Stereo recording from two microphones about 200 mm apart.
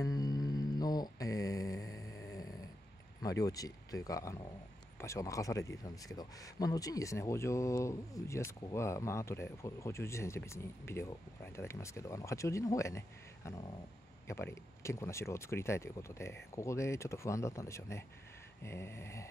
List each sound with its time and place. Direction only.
0.0 s mantra: 20° left (ahead or behind)
3.2 s speech: 15° left (ahead or behind)